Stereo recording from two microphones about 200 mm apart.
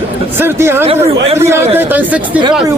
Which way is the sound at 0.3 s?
10° right (ahead or behind).